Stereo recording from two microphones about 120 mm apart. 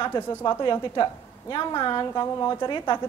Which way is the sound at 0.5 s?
40° left (ahead or behind).